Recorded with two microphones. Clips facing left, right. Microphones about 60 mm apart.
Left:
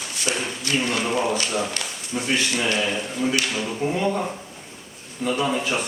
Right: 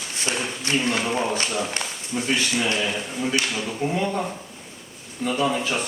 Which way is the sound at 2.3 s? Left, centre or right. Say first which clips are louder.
Left 1 dB; centre.